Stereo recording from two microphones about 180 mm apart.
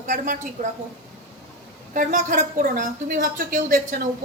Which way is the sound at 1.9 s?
45° right (ahead or behind).